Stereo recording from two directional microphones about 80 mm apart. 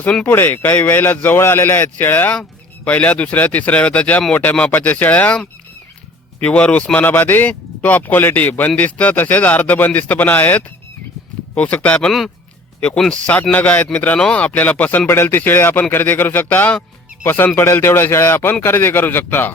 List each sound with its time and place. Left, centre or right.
0.0 s speech: centre
0.3 s speech: left
6.4 s speech: centre
11.9 s speech: centre; by 19.5 s left